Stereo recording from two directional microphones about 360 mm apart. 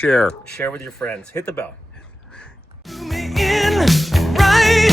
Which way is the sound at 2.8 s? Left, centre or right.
Centre.